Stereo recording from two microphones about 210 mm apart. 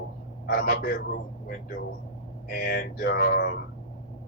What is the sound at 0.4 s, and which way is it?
Speech, 45° left (ahead or behind).